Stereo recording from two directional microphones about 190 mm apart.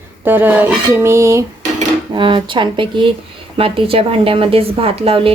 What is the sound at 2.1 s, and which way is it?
A woman's voice, 25° right (ahead or behind).